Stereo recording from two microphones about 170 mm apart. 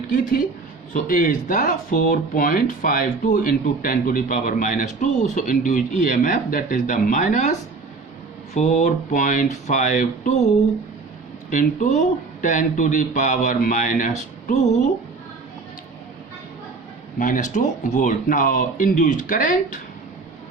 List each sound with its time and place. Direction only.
0.1 s a woman's voice: 55° left (ahead or behind)
8.5 s speech: 45° left (ahead or behind)
11.5 s speech: 45° left (ahead or behind)
17.2 s speech: 50° left (ahead or behind)